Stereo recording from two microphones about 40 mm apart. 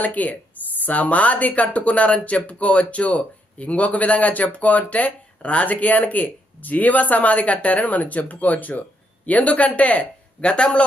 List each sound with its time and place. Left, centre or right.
0.0 s speech: left